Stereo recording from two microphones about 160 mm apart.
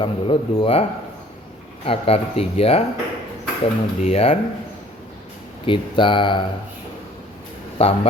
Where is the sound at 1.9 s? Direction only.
40° left (ahead or behind).